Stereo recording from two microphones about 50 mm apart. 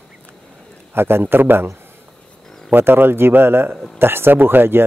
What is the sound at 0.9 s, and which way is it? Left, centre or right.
Speech, right.